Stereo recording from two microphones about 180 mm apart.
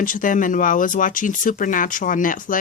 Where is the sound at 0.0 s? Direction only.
50° left (ahead or behind).